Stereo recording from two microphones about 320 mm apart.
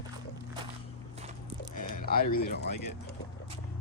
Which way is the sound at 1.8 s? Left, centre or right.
Left.